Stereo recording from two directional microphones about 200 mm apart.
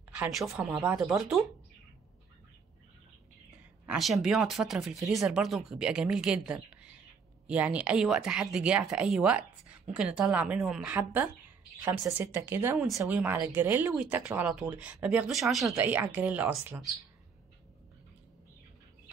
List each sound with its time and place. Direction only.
0.1 s speech: 5° right (ahead or behind)
3.8 s speech: centre (ahead or behind)